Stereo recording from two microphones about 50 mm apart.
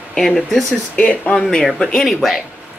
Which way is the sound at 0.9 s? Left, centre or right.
Left.